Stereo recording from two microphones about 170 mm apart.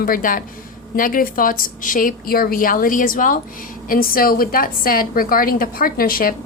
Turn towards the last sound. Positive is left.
turn(degrees=60)  # may be behind; listen again after turning